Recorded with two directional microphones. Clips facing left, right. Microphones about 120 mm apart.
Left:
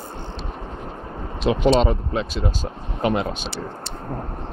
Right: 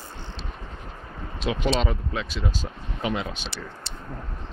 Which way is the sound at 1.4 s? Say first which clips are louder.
Left 7 dB; 40° left (ahead or behind).